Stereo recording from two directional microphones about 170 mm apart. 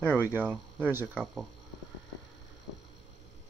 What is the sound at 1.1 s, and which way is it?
Speech, 5° left (ahead or behind).